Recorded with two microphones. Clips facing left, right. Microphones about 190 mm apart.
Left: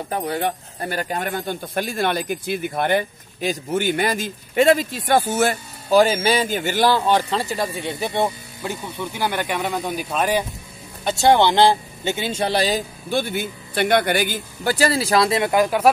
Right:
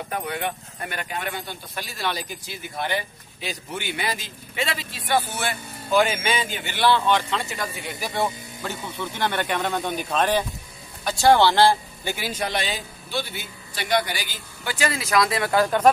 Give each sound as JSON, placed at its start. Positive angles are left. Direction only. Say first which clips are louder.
{"t": 0.1, "sound": "speech", "louder": "left 6 dB", "side_deg": 35}
{"t": 11.1, "sound": "speech", "louder": "left 1 dB", "side_deg": 20}